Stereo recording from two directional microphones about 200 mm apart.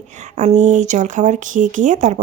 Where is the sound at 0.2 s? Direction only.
35° right (ahead or behind).